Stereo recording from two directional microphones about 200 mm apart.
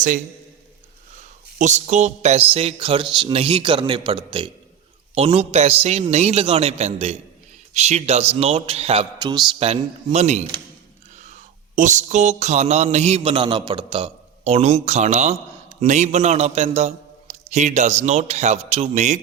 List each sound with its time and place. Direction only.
1.5 s a man's voice: 35° right (ahead or behind); by 9.4 s 20° right (ahead or behind)
9.6 s a man's voice: 30° right (ahead or behind)
11.2 s a sound: 40° right (ahead or behind)
15.8 s a man's voice: 35° right (ahead or behind)